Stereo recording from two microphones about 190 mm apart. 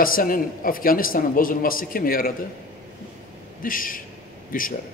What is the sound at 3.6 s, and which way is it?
Speech, 45° left (ahead or behind).